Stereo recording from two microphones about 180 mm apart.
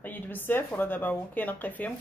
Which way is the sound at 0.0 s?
10° left (ahead or behind).